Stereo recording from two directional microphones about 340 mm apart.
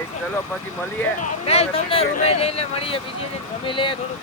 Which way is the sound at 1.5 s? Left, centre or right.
Centre.